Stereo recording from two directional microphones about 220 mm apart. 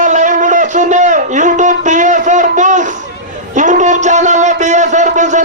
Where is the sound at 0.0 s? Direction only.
35° right (ahead or behind).